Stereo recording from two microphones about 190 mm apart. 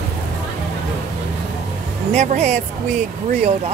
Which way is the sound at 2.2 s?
40° right (ahead or behind).